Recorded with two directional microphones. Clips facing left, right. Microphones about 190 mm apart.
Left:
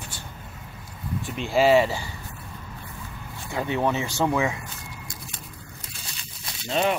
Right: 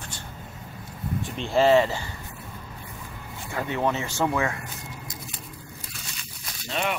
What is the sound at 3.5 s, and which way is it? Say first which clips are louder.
Speech: left 2 dB; 15° left (ahead or behind).